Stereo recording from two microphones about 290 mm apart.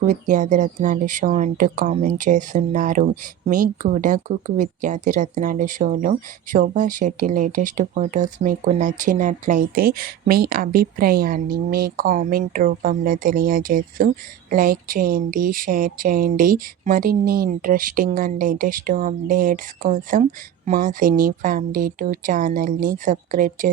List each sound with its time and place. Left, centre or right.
0.1 s speech: right